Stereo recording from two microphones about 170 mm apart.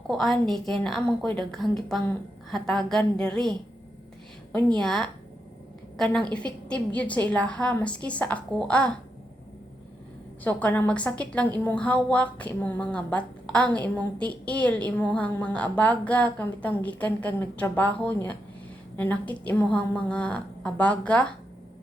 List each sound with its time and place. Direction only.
0.1 s a woman's voice: 5° left (ahead or behind)
4.7 s a woman's voice: 5° left (ahead or behind)
6.3 s a woman's voice: 5° left (ahead or behind)
10.4 s a woman's voice: 10° left (ahead or behind)